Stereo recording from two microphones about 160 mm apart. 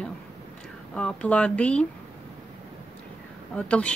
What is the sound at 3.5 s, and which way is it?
Speech, 5° left (ahead or behind).